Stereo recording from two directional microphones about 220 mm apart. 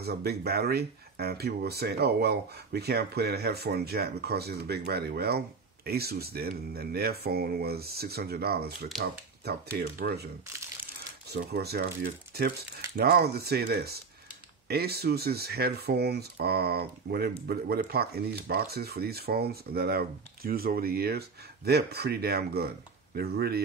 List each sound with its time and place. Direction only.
0.0 s speech: 45° right (ahead or behind)
11.3 s speech: 45° right (ahead or behind)